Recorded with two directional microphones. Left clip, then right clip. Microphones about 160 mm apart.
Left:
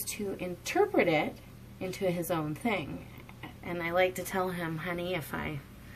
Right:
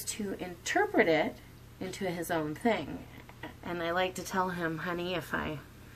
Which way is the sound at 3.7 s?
10° right (ahead or behind).